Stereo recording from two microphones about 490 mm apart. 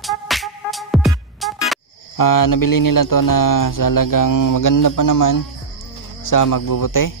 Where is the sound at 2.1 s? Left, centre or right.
Left.